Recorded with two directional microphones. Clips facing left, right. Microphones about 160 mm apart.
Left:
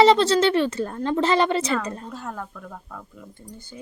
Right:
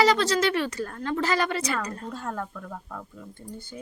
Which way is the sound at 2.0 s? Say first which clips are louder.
Right 1 dB; 5° left (ahead or behind).